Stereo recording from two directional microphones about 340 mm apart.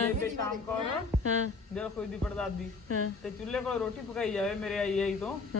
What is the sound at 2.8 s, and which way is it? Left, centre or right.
Speech, left.